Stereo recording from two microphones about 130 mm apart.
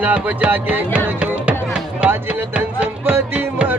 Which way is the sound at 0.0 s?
10° right (ahead or behind).